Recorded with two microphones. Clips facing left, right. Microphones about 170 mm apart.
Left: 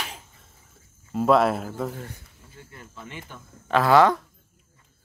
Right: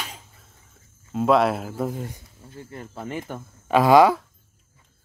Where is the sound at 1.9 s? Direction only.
15° right (ahead or behind).